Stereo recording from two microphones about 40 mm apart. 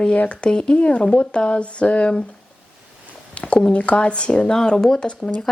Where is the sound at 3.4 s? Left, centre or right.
Left.